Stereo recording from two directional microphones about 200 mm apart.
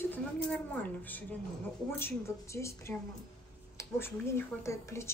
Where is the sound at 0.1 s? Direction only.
5° left (ahead or behind).